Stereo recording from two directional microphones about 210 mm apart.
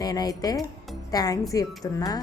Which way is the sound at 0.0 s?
20° left (ahead or behind).